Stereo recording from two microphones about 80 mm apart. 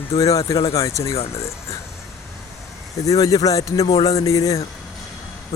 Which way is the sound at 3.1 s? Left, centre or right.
Left.